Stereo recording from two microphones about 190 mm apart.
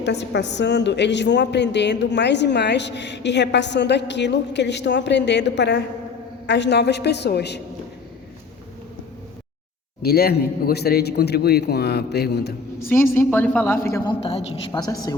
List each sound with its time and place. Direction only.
0.0 s a woman's voice: 65° left (ahead or behind)
10.0 s a woman's voice: 55° left (ahead or behind)
13.1 s a woman's voice: 10° left (ahead or behind); by 14.7 s 30° left (ahead or behind)
14.7 s a woman's voice: 20° left (ahead or behind)